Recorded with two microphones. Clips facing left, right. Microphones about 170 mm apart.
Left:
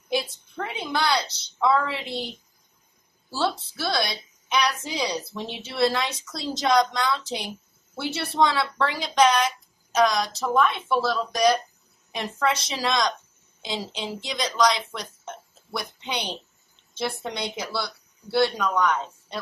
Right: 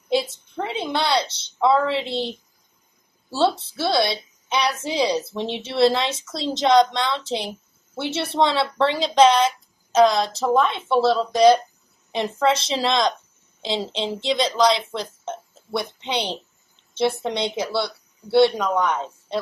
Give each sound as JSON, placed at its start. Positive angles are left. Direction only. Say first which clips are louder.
{"t": 0.1, "sound": "a woman's voice", "louder": "right 5 dB", "side_deg": -25}